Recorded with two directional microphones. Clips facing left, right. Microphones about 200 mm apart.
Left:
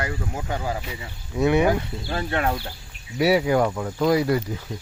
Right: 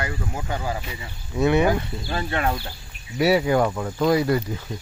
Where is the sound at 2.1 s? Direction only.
55° left (ahead or behind).